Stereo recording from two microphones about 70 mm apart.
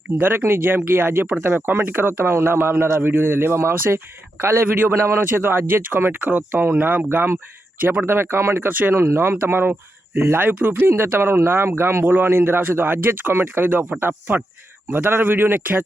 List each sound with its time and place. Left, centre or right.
0.2 s speech: right
10.4 s speech: right